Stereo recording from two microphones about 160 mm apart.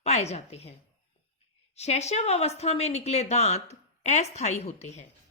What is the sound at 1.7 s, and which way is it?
A woman's voice, 45° left (ahead or behind).